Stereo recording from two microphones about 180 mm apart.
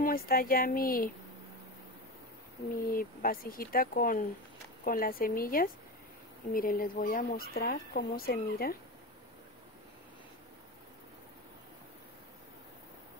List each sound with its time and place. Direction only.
0.0 s speech: 55° left (ahead or behind)
2.9 s speech: 50° left (ahead or behind)